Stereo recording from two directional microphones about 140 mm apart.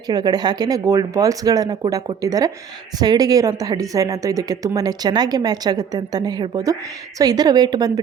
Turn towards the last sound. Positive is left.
turn(degrees=-30)  # may be behind; listen again after turning